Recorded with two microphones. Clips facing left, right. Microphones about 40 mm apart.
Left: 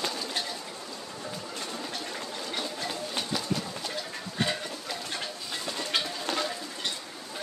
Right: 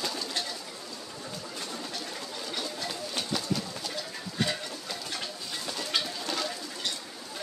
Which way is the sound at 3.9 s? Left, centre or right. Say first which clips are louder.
Left 1 dB; centre.